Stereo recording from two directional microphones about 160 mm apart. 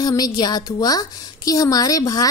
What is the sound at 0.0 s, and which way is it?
A woman's voice, 25° left (ahead or behind).